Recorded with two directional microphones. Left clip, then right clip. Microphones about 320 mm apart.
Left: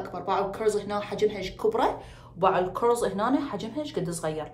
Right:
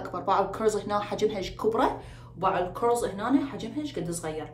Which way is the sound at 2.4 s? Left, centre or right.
Centre.